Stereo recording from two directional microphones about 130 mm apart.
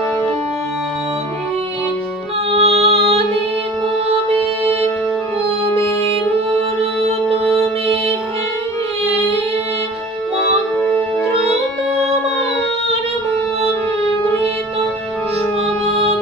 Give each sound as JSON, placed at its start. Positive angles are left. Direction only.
{"t": 2.5, "sound": "music", "side_deg": -50}
{"t": 5.8, "sound": "music", "side_deg": 15}
{"t": 10.8, "sound": "music", "side_deg": 15}